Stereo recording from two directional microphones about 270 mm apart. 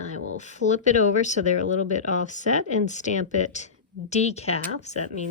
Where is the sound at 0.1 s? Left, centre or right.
Left.